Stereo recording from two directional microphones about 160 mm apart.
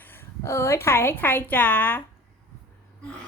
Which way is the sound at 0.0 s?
15° left (ahead or behind).